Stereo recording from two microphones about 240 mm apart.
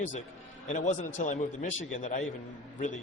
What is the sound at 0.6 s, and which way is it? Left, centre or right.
A man's voice, left.